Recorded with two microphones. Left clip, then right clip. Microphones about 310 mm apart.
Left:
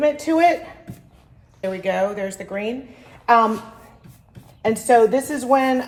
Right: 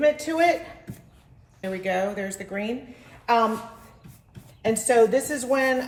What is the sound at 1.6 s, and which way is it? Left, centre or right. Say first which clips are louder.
A woman's voice: left 5 dB; left.